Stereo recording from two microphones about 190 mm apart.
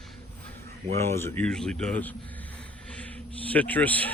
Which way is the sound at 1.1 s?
15° left (ahead or behind).